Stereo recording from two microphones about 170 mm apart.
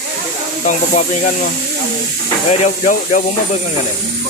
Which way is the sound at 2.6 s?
45° left (ahead or behind).